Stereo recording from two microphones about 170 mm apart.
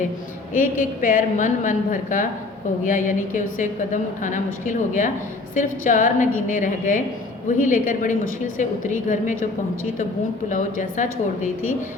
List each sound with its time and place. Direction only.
0.5 s a woman's voice: 50° left (ahead or behind)
10.5 s a woman's voice: 50° left (ahead or behind)